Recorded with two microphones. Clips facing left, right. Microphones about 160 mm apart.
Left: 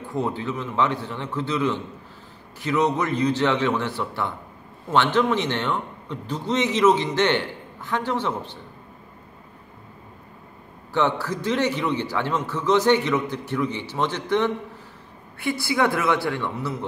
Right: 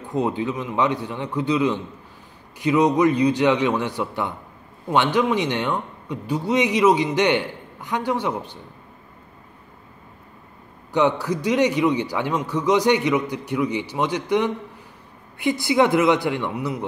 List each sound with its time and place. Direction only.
0.0 s a man's voice: 20° right (ahead or behind)
10.9 s a man's voice: 15° right (ahead or behind)